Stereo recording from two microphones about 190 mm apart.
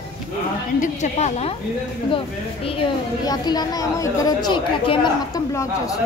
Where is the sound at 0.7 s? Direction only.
35° left (ahead or behind); by 5.9 s 15° left (ahead or behind).